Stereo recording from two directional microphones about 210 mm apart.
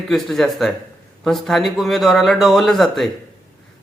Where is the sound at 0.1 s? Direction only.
Centre (ahead or behind).